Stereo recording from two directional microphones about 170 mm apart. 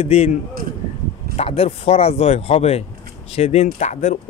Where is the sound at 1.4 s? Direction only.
35° left (ahead or behind).